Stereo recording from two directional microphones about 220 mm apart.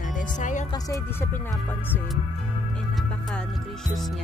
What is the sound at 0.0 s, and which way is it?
Music, 35° left (ahead or behind).